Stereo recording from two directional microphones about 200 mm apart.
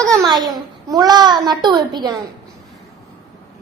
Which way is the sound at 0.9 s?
20° right (ahead or behind).